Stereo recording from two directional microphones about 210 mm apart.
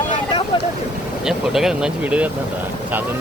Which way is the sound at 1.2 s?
Centre (ahead or behind).